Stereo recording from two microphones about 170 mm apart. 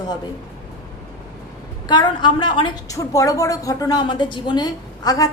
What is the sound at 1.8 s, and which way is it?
A woman's voice, 25° left (ahead or behind).